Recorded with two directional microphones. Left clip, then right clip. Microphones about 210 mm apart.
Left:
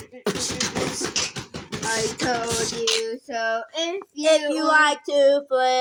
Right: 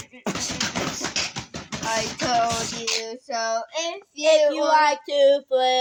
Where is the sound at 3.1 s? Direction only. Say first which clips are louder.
Left 1 dB; 30° right (ahead or behind).